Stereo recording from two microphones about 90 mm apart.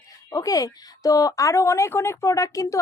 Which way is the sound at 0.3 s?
40° left (ahead or behind).